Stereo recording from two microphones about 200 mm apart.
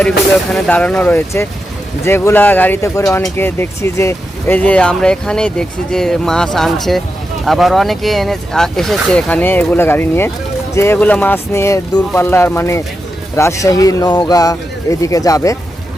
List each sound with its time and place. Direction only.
0.5 s speech: 5° left (ahead or behind)